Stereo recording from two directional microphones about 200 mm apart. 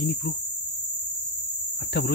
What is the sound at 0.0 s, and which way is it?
Cricket, 55° left (ahead or behind).